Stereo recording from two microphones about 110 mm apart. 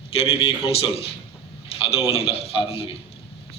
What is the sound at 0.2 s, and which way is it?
A man's voice, 60° left (ahead or behind).